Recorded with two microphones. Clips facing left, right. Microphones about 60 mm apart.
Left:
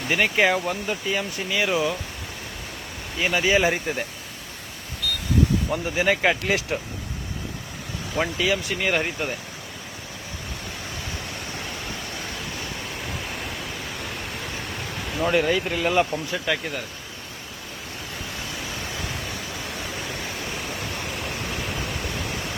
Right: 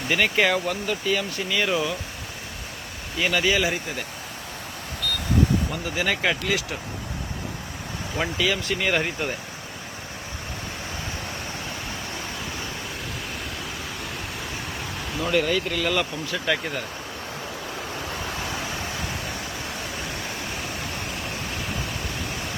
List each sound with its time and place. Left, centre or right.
0.1 s speech: centre
3.2 s speech: centre
3.4 s speech: left
3.7 s speech: left
5.7 s speech: left
8.1 s speech: centre
14.9 s a sound: centre
15.2 s speech: centre
16.5 s speech: centre
21.6 s vehicle: centre